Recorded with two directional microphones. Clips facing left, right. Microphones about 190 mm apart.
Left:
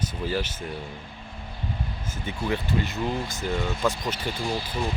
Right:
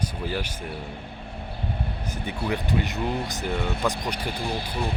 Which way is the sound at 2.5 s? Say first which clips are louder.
Even; 15° right (ahead or behind).